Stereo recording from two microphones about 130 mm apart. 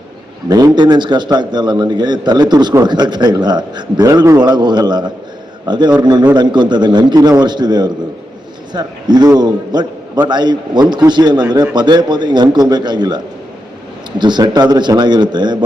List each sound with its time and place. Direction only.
0.4 s a man's voice: 30° right (ahead or behind)